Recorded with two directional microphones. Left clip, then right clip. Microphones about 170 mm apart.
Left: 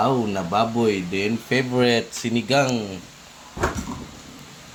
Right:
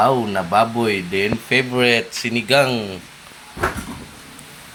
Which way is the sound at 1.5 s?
20° left (ahead or behind).